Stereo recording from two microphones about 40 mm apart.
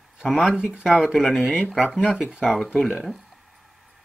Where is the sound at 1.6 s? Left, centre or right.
Centre.